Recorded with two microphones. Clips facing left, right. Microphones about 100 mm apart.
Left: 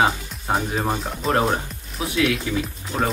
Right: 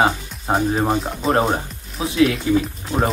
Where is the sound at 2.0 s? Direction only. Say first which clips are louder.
Right 4 dB; 30° right (ahead or behind).